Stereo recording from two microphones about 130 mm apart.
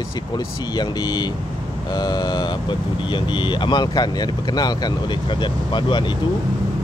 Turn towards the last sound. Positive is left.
turn(degrees=35)  # may be behind; listen again after turning